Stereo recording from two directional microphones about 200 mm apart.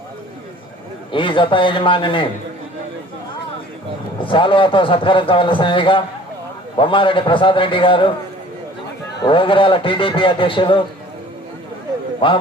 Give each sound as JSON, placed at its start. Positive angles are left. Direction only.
{"t": 1.1, "sound": "a man's voice", "side_deg": 25}
{"t": 4.2, "sound": "a man's voice", "side_deg": 25}
{"t": 9.2, "sound": "a man's voice", "side_deg": 25}
{"t": 12.2, "sound": "a man's voice", "side_deg": 25}